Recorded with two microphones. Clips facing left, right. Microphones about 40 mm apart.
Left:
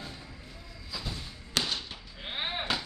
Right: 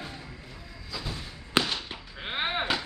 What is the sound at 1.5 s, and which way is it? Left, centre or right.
Fireworks, right.